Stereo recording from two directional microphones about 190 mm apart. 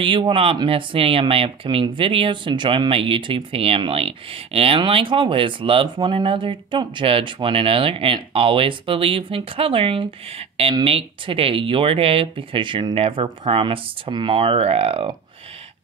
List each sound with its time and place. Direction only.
0.0 s speech: 25° right (ahead or behind)